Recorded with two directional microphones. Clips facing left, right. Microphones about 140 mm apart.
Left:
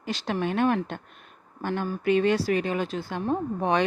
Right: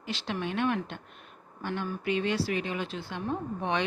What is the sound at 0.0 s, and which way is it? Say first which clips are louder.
Speech: left 5 dB; 45° left (ahead or behind).